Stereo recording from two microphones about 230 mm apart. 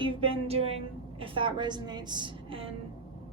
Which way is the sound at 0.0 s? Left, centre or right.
Right.